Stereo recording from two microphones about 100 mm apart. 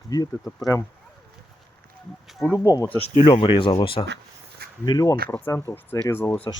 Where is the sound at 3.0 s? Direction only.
75° left (ahead or behind).